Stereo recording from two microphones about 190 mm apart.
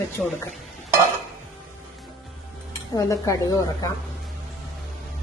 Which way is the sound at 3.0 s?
15° left (ahead or behind).